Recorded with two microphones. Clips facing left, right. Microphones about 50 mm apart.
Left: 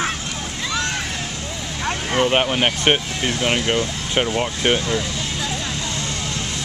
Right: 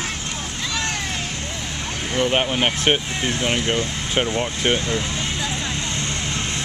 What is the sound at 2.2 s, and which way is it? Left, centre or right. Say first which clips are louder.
Speech: left 1 dB; centre.